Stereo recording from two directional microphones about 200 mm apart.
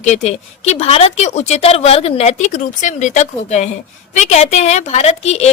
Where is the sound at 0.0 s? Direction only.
35° left (ahead or behind).